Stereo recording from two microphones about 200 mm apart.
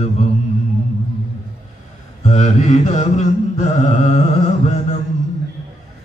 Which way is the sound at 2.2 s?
35° left (ahead or behind).